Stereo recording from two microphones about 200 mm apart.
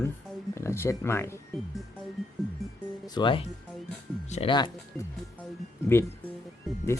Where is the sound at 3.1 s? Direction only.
25° left (ahead or behind).